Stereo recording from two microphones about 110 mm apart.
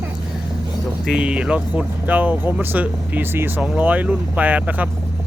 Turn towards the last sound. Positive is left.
turn(degrees=-15)  # may be behind; listen again after turning